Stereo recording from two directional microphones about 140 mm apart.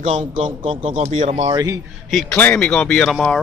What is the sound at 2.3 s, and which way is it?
Speech, 10° left (ahead or behind).